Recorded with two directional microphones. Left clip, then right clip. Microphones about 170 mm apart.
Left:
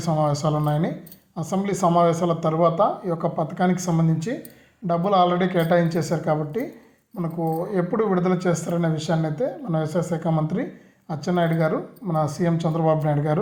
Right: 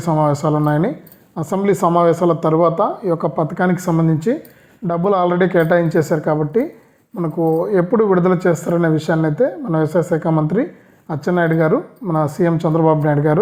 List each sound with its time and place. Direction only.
0.0 s a woman's voice: 45° right (ahead or behind)